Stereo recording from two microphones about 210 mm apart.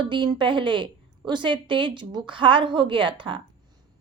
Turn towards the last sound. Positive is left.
turn(degrees=-25)  # may be behind; listen again after turning